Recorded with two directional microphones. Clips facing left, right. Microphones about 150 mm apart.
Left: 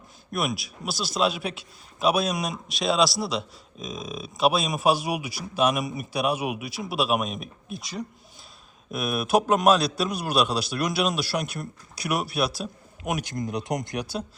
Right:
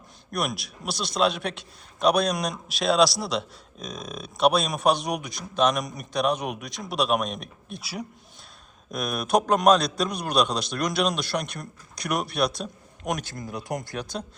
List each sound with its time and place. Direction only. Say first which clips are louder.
0.3 s a man's voice: left 1 dB; centre (ahead or behind)
13.2 s speech: left 5 dB; 20° left (ahead or behind)